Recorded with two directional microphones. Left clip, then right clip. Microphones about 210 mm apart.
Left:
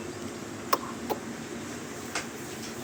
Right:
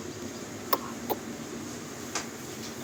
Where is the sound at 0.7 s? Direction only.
10° right (ahead or behind).